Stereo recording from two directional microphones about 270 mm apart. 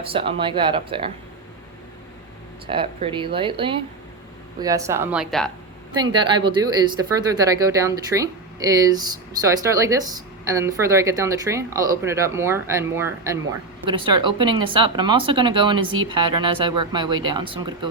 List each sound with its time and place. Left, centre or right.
0.1 s speech: centre
2.6 s speech: centre
6.0 s speech: centre